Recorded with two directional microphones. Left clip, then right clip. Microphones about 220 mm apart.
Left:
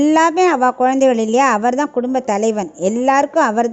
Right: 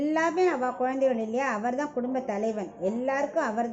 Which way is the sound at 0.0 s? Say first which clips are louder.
Left 12 dB; 50° left (ahead or behind).